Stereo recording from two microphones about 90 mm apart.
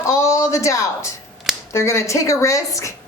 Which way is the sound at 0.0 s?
35° left (ahead or behind).